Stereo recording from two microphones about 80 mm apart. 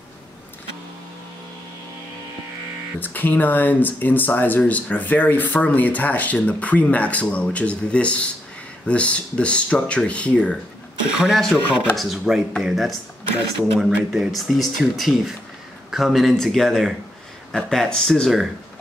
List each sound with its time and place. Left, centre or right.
3.0 s speech: left
11.1 s speech: centre